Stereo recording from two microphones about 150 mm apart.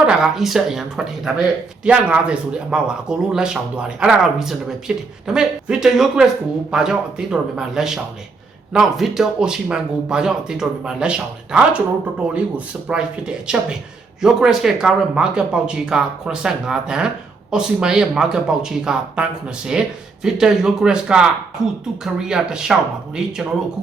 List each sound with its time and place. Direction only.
0.0 s speech: 5° right (ahead or behind)